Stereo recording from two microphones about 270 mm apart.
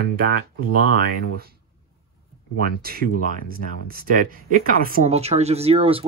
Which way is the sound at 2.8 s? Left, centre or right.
Right.